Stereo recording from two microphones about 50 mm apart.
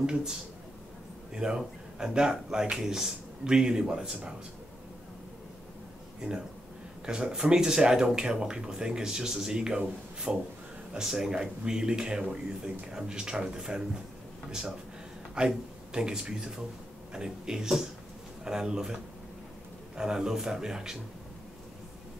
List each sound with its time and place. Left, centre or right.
0.0 s speech: centre
1.3 s speech: centre
7.1 s speech: centre
15.3 s speech: centre
20.0 s speech: centre